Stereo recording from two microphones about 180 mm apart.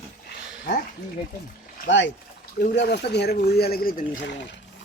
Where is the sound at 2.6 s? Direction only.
65° left (ahead or behind).